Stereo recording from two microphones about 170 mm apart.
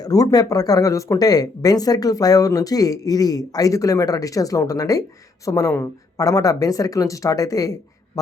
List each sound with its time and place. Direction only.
0.0 s speech: 20° left (ahead or behind)